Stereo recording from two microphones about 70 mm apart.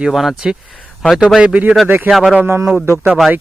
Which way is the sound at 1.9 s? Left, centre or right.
Right.